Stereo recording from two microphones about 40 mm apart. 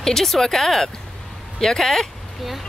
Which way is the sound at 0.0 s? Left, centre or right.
Centre.